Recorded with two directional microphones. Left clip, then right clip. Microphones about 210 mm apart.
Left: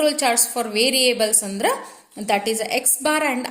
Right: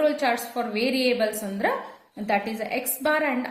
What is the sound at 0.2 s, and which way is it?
A woman's voice, 45° left (ahead or behind).